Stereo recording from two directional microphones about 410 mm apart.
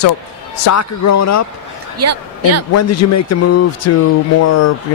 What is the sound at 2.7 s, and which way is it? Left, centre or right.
Speech, left.